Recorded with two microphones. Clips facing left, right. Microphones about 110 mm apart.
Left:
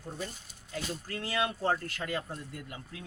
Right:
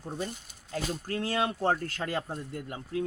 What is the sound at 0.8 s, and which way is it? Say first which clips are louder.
Speech: right 5 dB; 45° right (ahead or behind).